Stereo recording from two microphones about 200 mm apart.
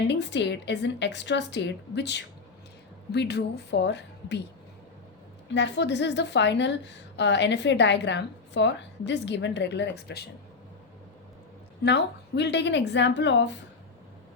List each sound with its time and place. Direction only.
0.1 s a woman's voice: 60° left (ahead or behind)
5.5 s a woman's voice: 60° left (ahead or behind)
11.8 s a woman's voice: 60° left (ahead or behind)